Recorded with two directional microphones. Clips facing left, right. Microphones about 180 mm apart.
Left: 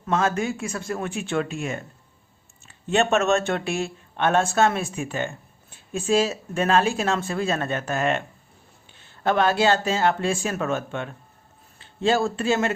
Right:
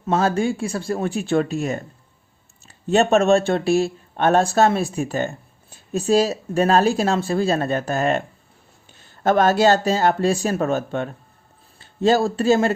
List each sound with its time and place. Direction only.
0.0 s speech: 30° right (ahead or behind)